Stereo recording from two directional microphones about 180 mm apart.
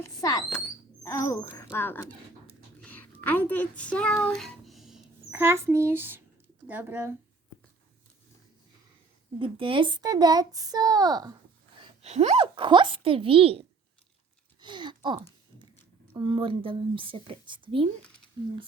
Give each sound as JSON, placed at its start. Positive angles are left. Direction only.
{"t": 0.0, "sound": "speech", "side_deg": 20}
{"t": 2.8, "sound": "a sound", "side_deg": 10}
{"t": 5.4, "sound": "a child's voice", "side_deg": -15}
{"t": 9.4, "sound": "speech", "side_deg": -30}
{"t": 11.8, "sound": "a child's voice", "side_deg": -35}
{"t": 14.6, "sound": "speech", "side_deg": -25}